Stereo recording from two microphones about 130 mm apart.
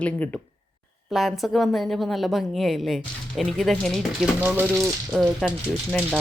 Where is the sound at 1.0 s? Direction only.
Centre (ahead or behind).